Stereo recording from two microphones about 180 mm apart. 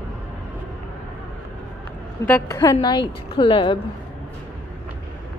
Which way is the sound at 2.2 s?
15° left (ahead or behind).